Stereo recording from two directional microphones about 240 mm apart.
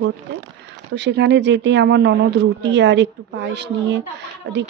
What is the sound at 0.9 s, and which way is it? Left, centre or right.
Speech, right.